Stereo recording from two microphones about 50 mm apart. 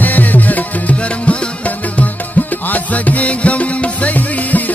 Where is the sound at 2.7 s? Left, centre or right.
Left.